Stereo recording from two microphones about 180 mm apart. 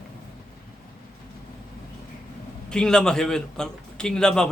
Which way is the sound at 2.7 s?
5° left (ahead or behind).